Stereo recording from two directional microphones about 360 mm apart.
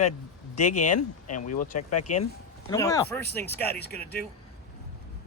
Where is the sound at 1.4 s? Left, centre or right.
Left.